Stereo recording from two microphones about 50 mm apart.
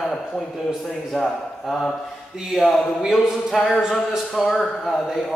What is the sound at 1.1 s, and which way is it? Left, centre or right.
Speech, centre.